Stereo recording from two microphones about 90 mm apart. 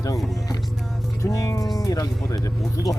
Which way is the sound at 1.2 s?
40° left (ahead or behind).